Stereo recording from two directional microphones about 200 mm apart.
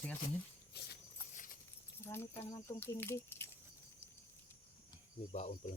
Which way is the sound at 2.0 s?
15° left (ahead or behind).